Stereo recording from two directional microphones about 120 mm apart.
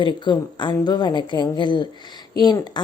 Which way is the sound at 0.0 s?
40° left (ahead or behind).